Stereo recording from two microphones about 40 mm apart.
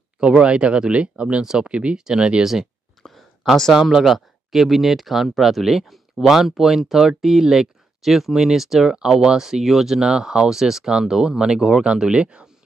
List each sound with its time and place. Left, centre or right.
0.2 s speech: right
1.4 s speech: centre
1.7 s speech: right
2.0 s speech: centre
3.0 s a sound: centre
3.7 s speech: centre; by 12.4 s right